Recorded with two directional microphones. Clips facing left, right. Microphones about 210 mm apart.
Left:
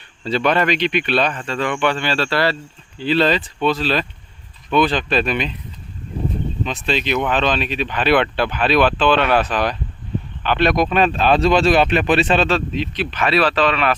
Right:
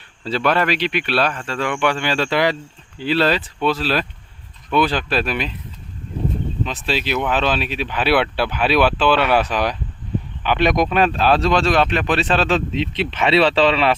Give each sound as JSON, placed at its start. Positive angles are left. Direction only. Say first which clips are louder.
{"t": 0.3, "sound": "speech", "louder": "left 1 dB", "side_deg": -5}
{"t": 6.7, "sound": "speech", "louder": "left 3 dB", "side_deg": -5}
{"t": 12.5, "sound": "speech", "louder": "right 1 dB", "side_deg": -20}